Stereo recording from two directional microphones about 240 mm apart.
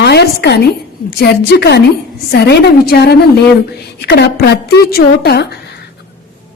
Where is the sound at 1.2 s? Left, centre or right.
Left.